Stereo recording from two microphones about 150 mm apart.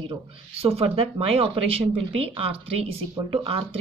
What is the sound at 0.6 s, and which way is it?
A woman's voice, 40° right (ahead or behind).